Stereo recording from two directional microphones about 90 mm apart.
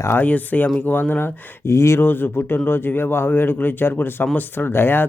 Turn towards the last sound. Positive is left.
turn(degrees=25)  # may be behind; listen again after turning